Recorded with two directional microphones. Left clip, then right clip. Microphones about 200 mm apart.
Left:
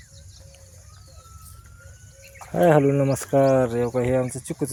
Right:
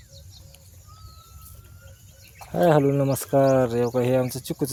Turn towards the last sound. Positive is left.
turn(degrees=-5)  # may be behind; listen again after turning